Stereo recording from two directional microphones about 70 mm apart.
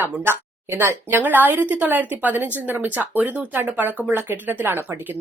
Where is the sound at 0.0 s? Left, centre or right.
Right.